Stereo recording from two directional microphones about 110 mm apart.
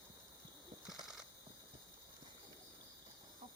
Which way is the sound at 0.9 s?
5° right (ahead or behind).